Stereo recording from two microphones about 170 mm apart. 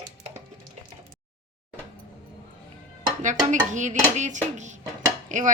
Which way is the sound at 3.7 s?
45° right (ahead or behind).